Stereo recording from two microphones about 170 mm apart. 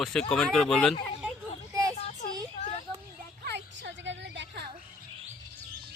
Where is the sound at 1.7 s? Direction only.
20° right (ahead or behind).